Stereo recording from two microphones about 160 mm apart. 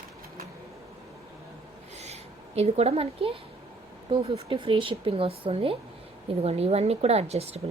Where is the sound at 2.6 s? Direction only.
40° right (ahead or behind).